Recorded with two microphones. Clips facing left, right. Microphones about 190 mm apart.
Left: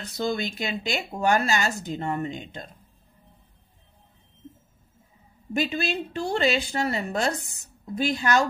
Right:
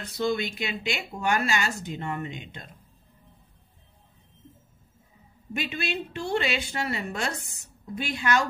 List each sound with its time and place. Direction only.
0.2 s speech: 40° left (ahead or behind)
5.5 s speech: 40° left (ahead or behind)